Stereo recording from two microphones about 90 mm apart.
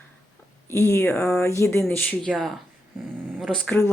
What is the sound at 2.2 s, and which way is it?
Speech, 5° left (ahead or behind).